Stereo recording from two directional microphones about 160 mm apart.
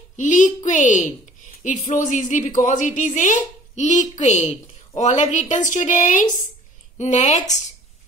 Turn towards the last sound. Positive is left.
turn(degrees=45)  # may be behind; listen again after turning